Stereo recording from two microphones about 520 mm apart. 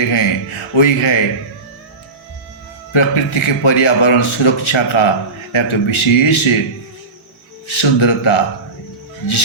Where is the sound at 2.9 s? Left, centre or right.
Left.